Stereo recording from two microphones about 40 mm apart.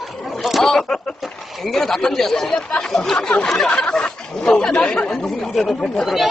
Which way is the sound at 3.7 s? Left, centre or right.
Left.